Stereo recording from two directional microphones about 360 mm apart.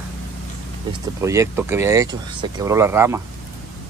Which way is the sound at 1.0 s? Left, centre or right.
Centre.